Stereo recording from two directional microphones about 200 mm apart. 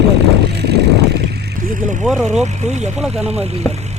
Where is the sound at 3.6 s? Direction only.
10° left (ahead or behind).